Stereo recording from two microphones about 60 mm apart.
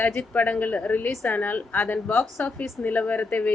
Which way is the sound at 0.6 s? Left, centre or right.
Left.